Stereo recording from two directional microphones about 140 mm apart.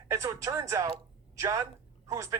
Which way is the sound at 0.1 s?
20° right (ahead or behind).